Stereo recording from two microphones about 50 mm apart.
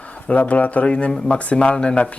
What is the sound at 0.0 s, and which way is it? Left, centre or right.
A man's voice, left.